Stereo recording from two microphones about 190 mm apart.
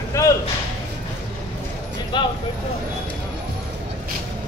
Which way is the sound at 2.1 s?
25° left (ahead or behind).